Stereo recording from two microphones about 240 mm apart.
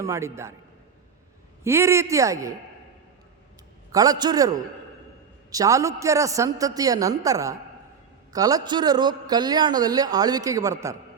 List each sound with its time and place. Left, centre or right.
0.0 s a man's voice: centre
1.6 s a man's voice: centre
3.9 s a man's voice: centre